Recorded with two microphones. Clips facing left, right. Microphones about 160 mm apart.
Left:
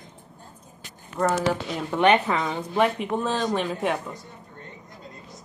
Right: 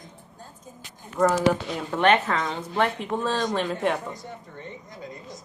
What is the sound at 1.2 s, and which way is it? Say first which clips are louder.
Speech: right 2 dB; centre (ahead or behind).